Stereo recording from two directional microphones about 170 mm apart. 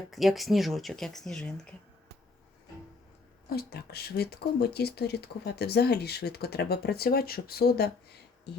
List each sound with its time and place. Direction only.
0.1 s speech: centre (ahead or behind)
3.5 s speech: 65° left (ahead or behind)